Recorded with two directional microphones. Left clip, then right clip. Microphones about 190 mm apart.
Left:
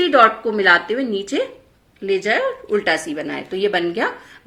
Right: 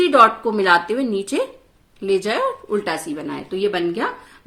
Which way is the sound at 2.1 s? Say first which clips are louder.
Left 1 dB; 50° right (ahead or behind).